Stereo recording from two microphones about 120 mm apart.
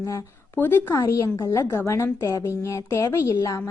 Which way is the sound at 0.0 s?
25° left (ahead or behind).